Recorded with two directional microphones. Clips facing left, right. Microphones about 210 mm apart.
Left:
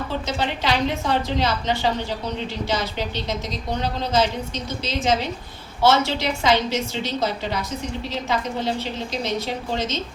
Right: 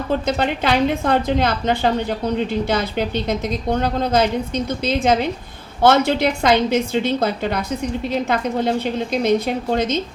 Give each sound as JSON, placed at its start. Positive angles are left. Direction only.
{"t": 0.3, "sound": "a woman's voice", "side_deg": -55}